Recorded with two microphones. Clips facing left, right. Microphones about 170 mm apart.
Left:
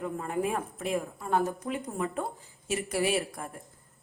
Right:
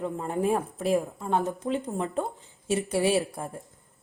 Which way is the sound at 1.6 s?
35° right (ahead or behind).